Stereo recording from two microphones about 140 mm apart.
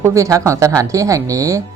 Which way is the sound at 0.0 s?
20° right (ahead or behind).